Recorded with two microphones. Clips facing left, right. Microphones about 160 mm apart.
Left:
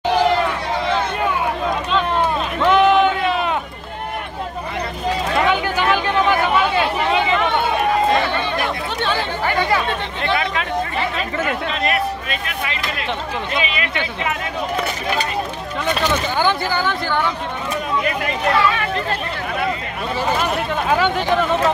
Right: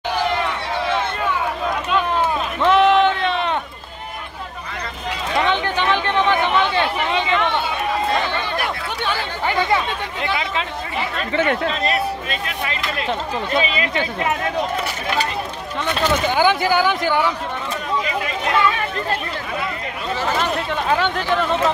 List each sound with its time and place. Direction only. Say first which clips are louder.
2.6 s a sound: even; centre (ahead or behind)
5.5 s a sound: left 1 dB; 10° left (ahead or behind)
6.4 s chatter: left 1 dB; 5° left (ahead or behind)
11.6 s a man's voice: even; 30° right (ahead or behind)
13.6 s speech: right 4 dB; 35° right (ahead or behind)
16.3 s speech: right 3 dB; 10° right (ahead or behind)
20.9 s speech: left 2 dB; 5° left (ahead or behind)